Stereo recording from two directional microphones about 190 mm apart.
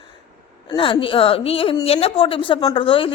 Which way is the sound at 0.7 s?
25° left (ahead or behind).